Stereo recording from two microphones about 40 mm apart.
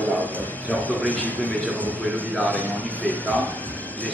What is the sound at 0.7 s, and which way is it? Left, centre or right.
A man's voice, left.